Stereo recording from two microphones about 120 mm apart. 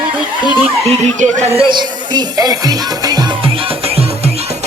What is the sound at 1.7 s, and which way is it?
Music, 40° right (ahead or behind).